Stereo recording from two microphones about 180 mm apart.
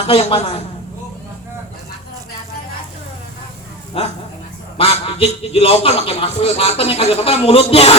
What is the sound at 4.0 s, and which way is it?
A man's voice, 30° left (ahead or behind).